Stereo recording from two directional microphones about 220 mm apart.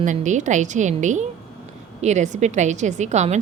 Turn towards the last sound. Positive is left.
turn(degrees=-30)  # may be behind; listen again after turning